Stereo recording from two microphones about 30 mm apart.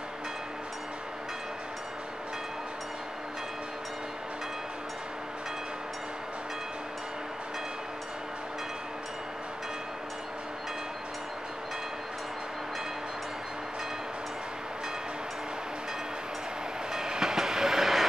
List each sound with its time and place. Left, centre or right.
16.9 s train: centre